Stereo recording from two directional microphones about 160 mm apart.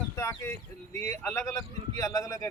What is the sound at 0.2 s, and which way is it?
A man's voice, 15° left (ahead or behind).